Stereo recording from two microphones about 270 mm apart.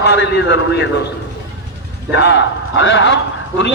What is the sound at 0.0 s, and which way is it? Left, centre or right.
Speech, left.